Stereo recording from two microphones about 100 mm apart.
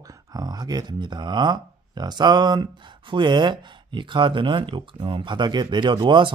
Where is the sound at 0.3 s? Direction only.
45° right (ahead or behind).